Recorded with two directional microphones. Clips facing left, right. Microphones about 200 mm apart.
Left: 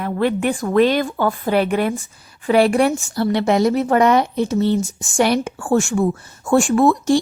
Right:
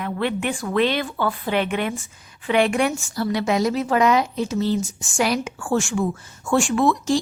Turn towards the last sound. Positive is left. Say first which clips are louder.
# left 5 dB
turn(degrees=55)  # may be behind; listen again after turning